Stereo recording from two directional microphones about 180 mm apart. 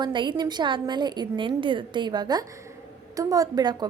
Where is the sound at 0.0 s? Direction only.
25° right (ahead or behind).